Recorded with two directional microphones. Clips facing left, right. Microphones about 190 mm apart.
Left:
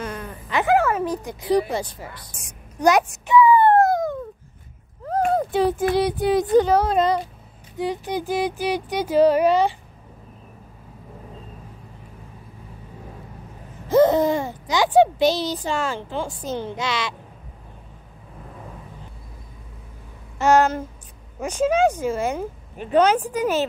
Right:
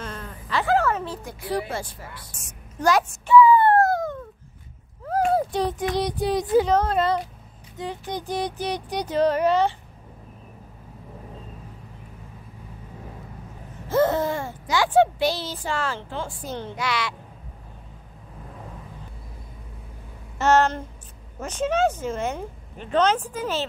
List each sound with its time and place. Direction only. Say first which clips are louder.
0.0 s sheep: left 4 dB; 15° left (ahead or behind)
2.4 s a sound: left 4 dB; 15° left (ahead or behind)
5.0 s speech: left 1 dB; centre (ahead or behind)
6.7 s speech: left 2 dB; 10° left (ahead or behind)
13.8 s a child's voice: left 5 dB; 15° left (ahead or behind)
20.3 s speech: left 2 dB; 10° left (ahead or behind)